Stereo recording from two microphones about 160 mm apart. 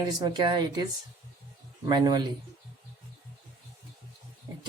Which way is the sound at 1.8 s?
25° right (ahead or behind).